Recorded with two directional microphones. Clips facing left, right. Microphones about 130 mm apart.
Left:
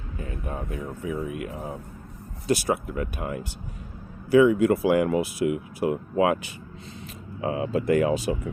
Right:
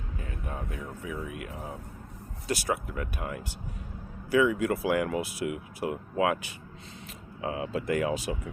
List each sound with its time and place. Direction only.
0.4 s speech: 30° left (ahead or behind)